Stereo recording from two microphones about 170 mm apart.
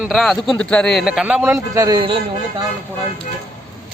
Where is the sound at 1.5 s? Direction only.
20° right (ahead or behind).